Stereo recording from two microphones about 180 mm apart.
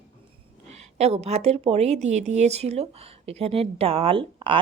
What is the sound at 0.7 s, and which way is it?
Speech, 35° right (ahead or behind).